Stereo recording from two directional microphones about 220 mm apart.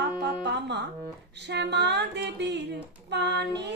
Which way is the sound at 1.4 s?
50° right (ahead or behind).